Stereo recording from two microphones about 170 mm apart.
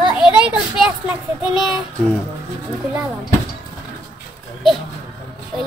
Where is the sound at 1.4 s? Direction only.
5° right (ahead or behind).